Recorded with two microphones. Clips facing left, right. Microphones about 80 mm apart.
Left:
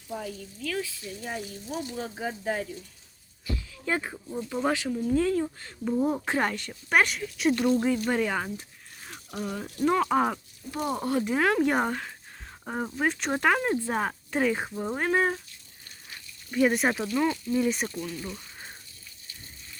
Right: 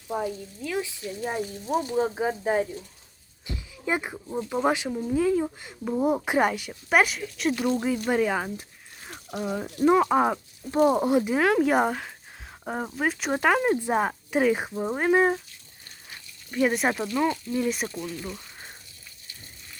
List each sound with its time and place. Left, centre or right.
0.1 s frying: right
1.0 s speech: right
2.0 s speech: right
3.4 s a sound: right
4.6 s frying: centre
5.0 s speech: centre
5.9 s speech: right
10.7 s frying: right
11.3 s speech: centre
16.5 s speech: centre
17.8 s speech: centre